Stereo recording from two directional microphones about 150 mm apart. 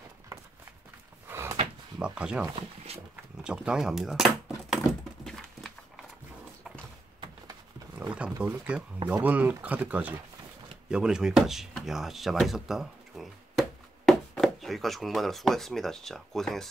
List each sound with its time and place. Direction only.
1.3 s drawer open or close: 15° right (ahead or behind)
2.0 s speech: 5° right (ahead or behind)
2.9 s speech: 45° right (ahead or behind)
3.4 s speech: 5° right (ahead or behind)
5.2 s a sound: centre (ahead or behind)
8.1 s speech: 10° right (ahead or behind)